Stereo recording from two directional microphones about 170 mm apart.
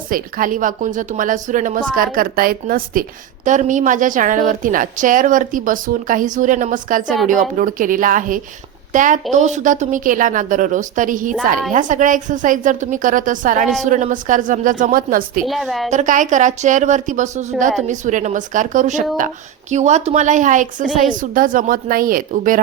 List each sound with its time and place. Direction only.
0.1 s a woman's voice: 55° right (ahead or behind)
15.4 s a woman's voice: centre (ahead or behind)
15.9 s a woman's voice: 45° right (ahead or behind)